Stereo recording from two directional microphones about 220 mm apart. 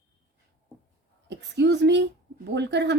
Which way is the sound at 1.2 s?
50° right (ahead or behind).